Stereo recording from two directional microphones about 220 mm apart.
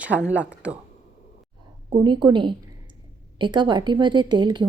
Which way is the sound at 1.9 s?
20° right (ahead or behind).